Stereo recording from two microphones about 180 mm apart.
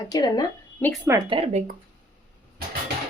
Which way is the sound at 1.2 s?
30° right (ahead or behind).